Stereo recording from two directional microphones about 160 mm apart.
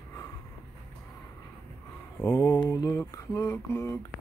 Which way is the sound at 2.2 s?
15° left (ahead or behind).